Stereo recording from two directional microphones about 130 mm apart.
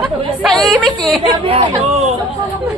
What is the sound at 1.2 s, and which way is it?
Speech, 40° right (ahead or behind).